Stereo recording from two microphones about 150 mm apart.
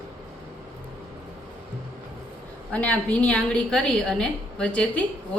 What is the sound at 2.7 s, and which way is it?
A woman's voice, 10° left (ahead or behind).